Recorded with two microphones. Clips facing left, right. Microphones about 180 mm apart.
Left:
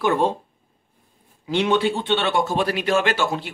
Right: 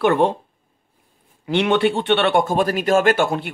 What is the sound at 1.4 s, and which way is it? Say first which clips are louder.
Speech: right 2 dB; 65° right (ahead or behind).